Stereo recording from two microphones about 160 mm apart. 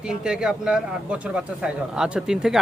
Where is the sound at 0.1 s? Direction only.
5° right (ahead or behind).